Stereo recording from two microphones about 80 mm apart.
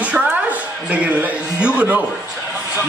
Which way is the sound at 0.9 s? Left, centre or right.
Centre.